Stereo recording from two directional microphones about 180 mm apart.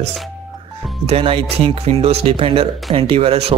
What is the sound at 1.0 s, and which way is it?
Speech, 30° right (ahead or behind).